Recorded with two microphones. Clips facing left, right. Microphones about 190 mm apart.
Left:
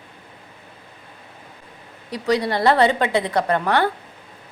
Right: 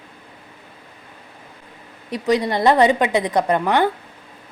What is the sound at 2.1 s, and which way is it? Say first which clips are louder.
A woman's voice: right 2 dB; 20° right (ahead or behind).